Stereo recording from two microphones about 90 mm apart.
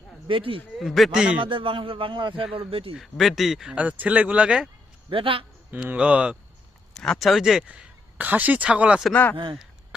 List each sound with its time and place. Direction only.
0.3 s speech: 80° right
0.8 s speech: centre (ahead or behind)
1.4 s a man's voice: 70° right (ahead or behind)
2.6 s speech: 90° right
2.9 s speech: centre (ahead or behind)
3.8 s speech: 15° right (ahead or behind)
5.1 s a man's voice: 80° right
5.7 s speech: 15° right (ahead or behind)
6.9 s speech: 5° left (ahead or behind)
8.2 s speech: 20° right (ahead or behind)
9.3 s a man's voice: 70° right (ahead or behind)